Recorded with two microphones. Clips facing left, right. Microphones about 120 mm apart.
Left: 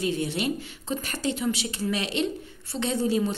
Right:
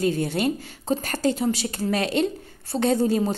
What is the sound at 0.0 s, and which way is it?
A woman's voice, 45° right (ahead or behind).